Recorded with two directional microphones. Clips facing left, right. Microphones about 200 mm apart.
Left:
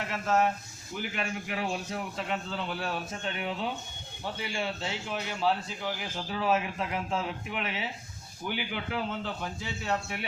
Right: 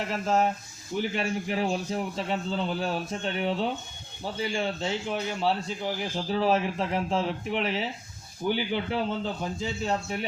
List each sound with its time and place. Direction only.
0.1 s a man's voice: 30° right (ahead or behind)